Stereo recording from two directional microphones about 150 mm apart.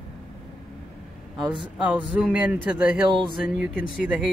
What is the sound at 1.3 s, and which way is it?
Speech, 30° right (ahead or behind).